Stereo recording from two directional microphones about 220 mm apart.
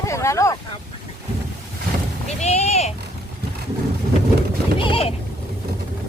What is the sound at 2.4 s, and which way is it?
Speech, 30° left (ahead or behind).